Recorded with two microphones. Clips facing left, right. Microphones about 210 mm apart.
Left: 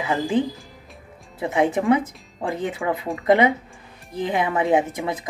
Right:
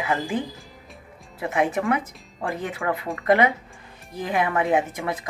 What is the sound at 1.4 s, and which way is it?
Speech, 20° left (ahead or behind).